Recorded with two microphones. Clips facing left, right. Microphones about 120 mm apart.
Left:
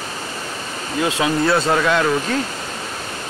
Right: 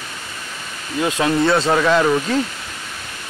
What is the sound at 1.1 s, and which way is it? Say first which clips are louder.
Speech: right 2 dB; 5° left (ahead or behind).